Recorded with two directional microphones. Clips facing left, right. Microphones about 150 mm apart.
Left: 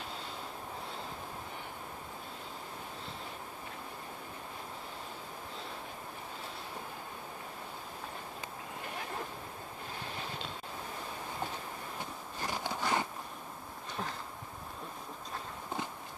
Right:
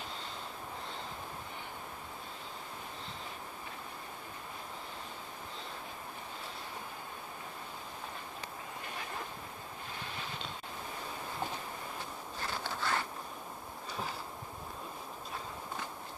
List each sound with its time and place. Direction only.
12.4 s biting: 15° left (ahead or behind)